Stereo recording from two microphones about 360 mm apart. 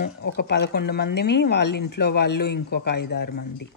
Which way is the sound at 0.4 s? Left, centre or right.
Left.